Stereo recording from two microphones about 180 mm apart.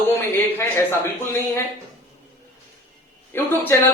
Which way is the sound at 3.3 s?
15° left (ahead or behind).